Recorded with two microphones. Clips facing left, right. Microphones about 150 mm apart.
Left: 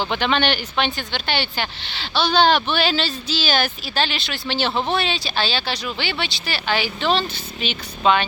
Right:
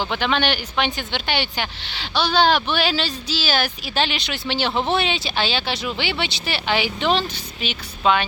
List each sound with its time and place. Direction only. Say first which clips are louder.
0.0 s speech: left 1 dB; 5° right (ahead or behind)